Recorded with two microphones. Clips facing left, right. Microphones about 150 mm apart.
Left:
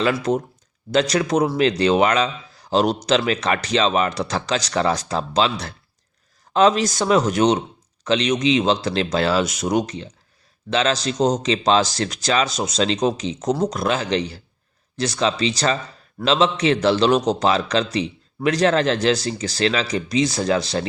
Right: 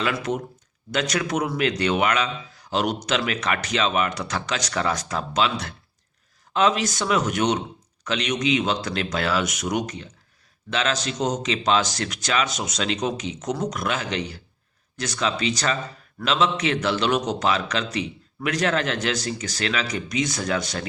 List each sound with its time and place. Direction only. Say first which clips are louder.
0.0 s a man's voice: left 5 dB; 35° left (ahead or behind)